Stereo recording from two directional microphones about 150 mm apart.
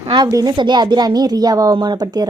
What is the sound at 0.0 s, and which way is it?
A woman's voice, 30° right (ahead or behind).